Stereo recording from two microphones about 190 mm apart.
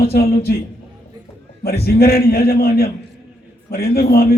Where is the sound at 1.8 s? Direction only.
55° left (ahead or behind).